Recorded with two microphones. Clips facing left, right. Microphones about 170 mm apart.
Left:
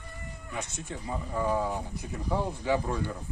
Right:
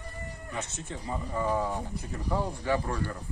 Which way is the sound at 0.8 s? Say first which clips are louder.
Even; centre (ahead or behind).